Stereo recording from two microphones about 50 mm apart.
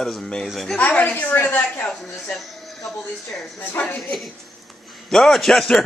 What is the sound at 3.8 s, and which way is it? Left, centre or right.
Speech, left.